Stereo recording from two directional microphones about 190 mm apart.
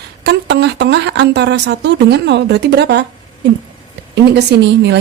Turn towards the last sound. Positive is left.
turn(degrees=-65)  # may be behind; listen again after turning